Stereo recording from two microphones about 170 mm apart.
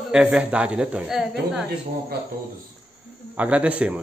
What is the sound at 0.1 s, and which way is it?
A man's voice, 5° right (ahead or behind).